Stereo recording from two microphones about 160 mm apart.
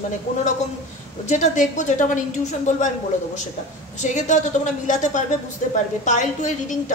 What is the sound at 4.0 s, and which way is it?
A woman's voice, 50° left (ahead or behind).